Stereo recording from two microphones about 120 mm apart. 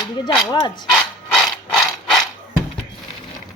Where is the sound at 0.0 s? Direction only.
30° left (ahead or behind).